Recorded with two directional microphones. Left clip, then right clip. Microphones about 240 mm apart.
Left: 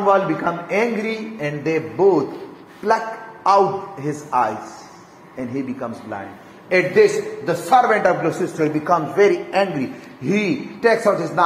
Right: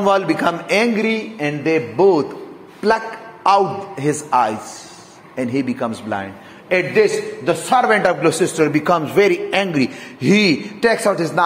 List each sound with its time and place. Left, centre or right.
0.0 s a man's voice: right
3.4 s a man's voice: right
5.8 s a man's voice: right
6.7 s a man's voice: right